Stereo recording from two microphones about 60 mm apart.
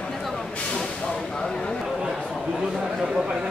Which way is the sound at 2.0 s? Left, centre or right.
Centre.